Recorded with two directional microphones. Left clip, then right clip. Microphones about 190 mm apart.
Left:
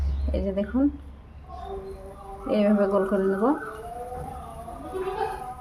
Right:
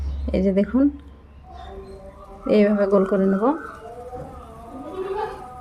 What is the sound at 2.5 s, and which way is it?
A woman's voice, 40° right (ahead or behind).